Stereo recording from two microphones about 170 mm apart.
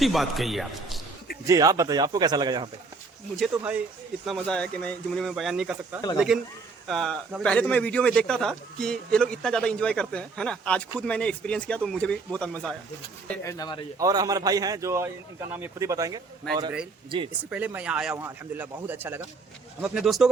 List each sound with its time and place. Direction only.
0.0 s a man's voice: centre (ahead or behind)
1.5 s a man's voice: 20° right (ahead or behind)
3.6 s speech: 10° right (ahead or behind)
4.3 s a man's voice: 5° left (ahead or behind)
13.4 s speech: 20° left (ahead or behind)
14.0 s a man's voice: 20° right (ahead or behind)
16.4 s a man's voice: 5° left (ahead or behind)
17.1 s speech: 30° right (ahead or behind)
17.5 s a man's voice: 10° right (ahead or behind)